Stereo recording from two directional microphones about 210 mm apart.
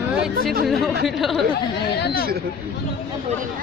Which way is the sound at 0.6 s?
Centre (ahead or behind).